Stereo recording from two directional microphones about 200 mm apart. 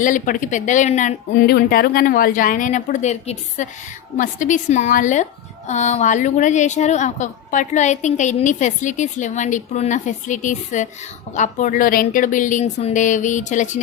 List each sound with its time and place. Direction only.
0.0 s a woman's voice: 40° left (ahead or behind)
1.5 s a woman's voice: 50° left (ahead or behind)